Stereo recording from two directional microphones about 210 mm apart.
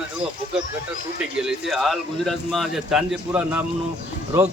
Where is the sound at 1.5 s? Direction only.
Centre (ahead or behind).